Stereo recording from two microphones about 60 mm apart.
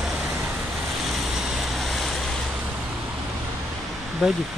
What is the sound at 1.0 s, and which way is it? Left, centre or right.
Waves, centre.